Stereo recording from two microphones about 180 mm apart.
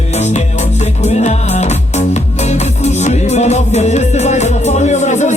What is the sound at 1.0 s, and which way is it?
Music, 40° left (ahead or behind).